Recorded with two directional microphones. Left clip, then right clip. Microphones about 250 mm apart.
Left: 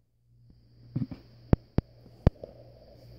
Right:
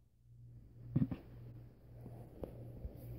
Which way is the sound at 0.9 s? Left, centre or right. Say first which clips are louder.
Left 2 dB; centre.